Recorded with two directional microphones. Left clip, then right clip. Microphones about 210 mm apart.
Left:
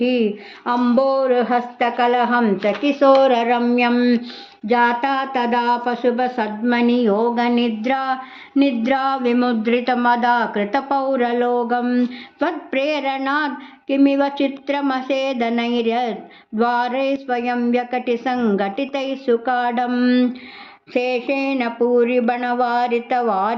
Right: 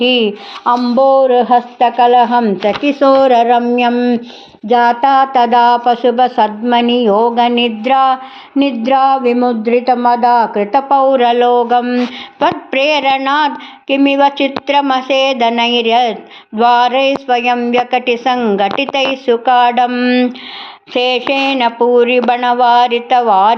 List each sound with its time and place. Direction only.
0.0 s a sound: centre (ahead or behind)
0.7 s speech: 20° right (ahead or behind)
2.6 s speech: 35° right (ahead or behind)
3.9 s speech: 10° right (ahead or behind)
4.7 s speech: 25° right (ahead or behind)
7.0 s a sound: 10° right (ahead or behind)
9.3 s speech: 5° right (ahead or behind); by 23.6 s 10° left (ahead or behind)